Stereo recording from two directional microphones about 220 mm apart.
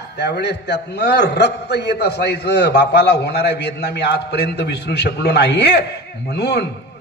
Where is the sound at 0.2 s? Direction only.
50° left (ahead or behind).